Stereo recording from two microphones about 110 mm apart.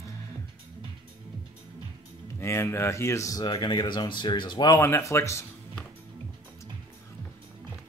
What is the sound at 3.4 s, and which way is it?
Speech, 40° left (ahead or behind).